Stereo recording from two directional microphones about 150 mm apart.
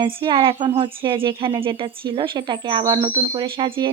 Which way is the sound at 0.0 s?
35° right (ahead or behind).